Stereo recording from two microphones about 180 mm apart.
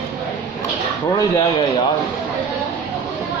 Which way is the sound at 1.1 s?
20° left (ahead or behind).